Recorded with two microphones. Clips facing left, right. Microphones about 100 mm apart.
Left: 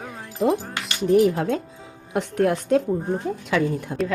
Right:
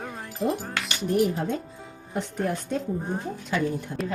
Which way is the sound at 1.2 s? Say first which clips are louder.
Left 5 dB; 90° left.